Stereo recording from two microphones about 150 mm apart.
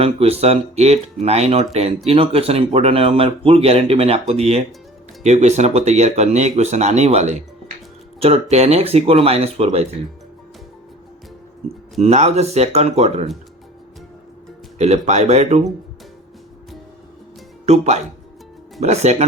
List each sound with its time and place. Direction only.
0.0 s speech: 40° right (ahead or behind)
11.9 s speech: 45° right (ahead or behind)
14.8 s speech: 50° right (ahead or behind)
17.7 s speech: 50° right (ahead or behind)